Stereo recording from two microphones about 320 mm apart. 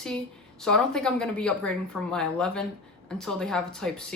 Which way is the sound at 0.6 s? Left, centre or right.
Centre.